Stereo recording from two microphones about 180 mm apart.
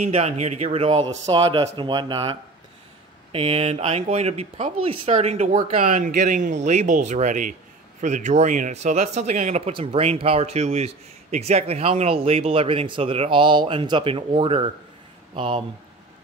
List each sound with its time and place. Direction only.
0.1 s speech: 35° right (ahead or behind)